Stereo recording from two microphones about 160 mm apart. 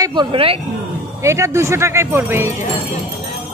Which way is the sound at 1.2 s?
20° right (ahead or behind).